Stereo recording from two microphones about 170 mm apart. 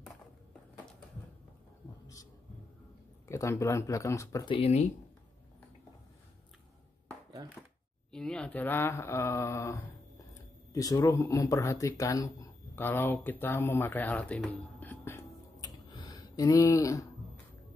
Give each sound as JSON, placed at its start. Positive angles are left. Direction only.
{"t": 3.3, "sound": "speech", "side_deg": 15}
{"t": 4.6, "sound": "speech", "side_deg": 35}
{"t": 8.1, "sound": "speech", "side_deg": 5}
{"t": 14.8, "sound": "a sound", "side_deg": 10}